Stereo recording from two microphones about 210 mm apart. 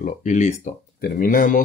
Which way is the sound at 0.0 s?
35° left (ahead or behind).